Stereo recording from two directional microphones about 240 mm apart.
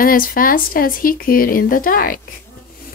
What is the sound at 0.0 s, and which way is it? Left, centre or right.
A child's voice, left.